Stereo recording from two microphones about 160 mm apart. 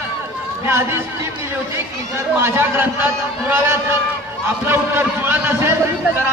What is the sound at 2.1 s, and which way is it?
A man's voice, 15° right (ahead or behind).